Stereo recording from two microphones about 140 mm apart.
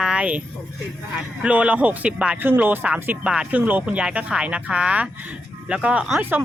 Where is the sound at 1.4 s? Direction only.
10° right (ahead or behind).